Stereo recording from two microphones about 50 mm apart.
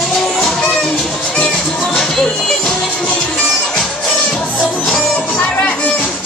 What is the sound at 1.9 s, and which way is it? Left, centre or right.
Music, centre.